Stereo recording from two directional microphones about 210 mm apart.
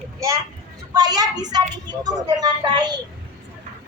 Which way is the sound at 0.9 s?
20° right (ahead or behind).